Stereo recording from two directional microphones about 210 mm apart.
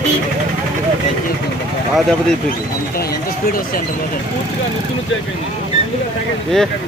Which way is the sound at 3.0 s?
45° left (ahead or behind).